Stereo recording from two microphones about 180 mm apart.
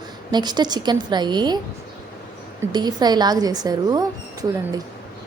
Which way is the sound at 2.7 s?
25° right (ahead or behind).